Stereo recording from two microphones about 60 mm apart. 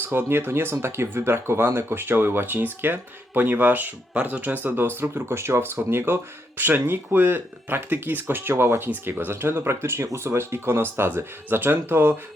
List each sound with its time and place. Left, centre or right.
0.0 s speech: right